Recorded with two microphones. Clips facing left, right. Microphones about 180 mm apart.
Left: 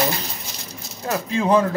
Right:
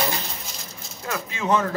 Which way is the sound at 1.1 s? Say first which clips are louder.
Left 4 dB; 35° left (ahead or behind).